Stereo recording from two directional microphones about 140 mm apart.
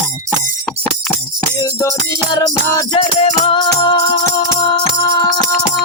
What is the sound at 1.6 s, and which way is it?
Music, 30° left (ahead or behind).